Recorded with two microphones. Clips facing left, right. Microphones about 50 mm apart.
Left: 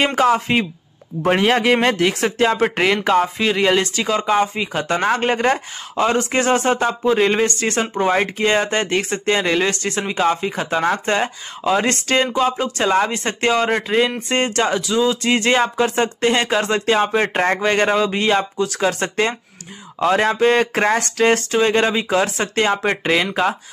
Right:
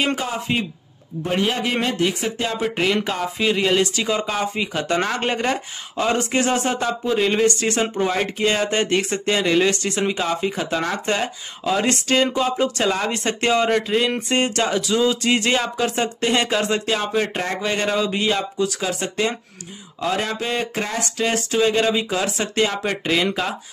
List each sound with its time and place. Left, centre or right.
0.1 s speech: left
1.6 s speech: left
2.4 s speech: left
3.3 s speech: left
3.8 s speech: left
4.1 s speech: left
9.7 s speech: left
14.3 s speech: left